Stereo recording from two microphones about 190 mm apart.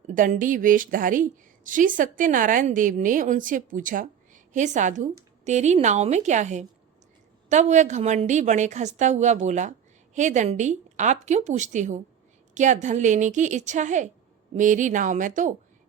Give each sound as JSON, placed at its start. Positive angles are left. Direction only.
{"t": 0.1, "sound": "a woman's voice", "side_deg": -45}